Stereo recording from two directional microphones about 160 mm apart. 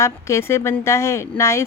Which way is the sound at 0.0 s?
15° left (ahead or behind).